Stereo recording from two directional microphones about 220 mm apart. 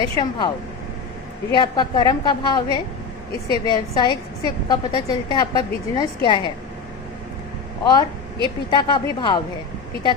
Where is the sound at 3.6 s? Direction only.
20° left (ahead or behind).